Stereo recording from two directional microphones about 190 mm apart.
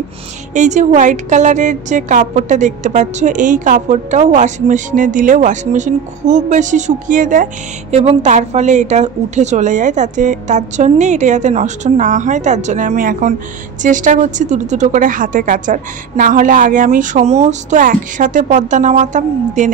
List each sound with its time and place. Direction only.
0.6 s a woman's voice: 40° right (ahead or behind)